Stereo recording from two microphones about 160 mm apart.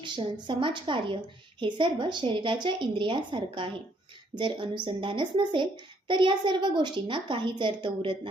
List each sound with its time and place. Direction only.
0.0 s a woman's voice: 30° right (ahead or behind)